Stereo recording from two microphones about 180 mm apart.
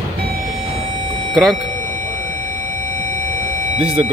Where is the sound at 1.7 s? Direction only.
40° right (ahead or behind).